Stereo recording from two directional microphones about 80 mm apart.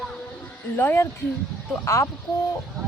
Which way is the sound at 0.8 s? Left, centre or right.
Left.